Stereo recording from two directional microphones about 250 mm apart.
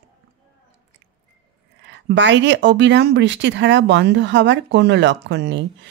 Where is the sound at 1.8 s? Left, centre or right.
Right.